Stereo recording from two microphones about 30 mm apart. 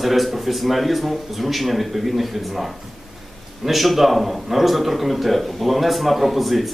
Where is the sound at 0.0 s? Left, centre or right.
Centre.